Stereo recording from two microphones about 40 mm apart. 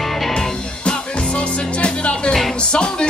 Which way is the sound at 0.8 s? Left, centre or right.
Left.